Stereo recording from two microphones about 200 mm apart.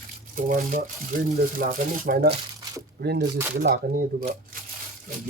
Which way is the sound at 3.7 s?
40° right (ahead or behind).